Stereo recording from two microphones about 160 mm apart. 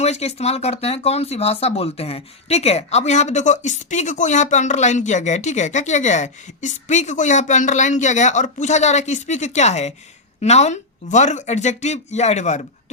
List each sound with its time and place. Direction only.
0.0 s speech: 40° left (ahead or behind)